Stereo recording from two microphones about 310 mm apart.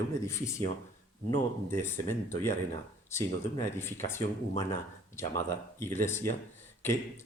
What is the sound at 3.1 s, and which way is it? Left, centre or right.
Speech, centre.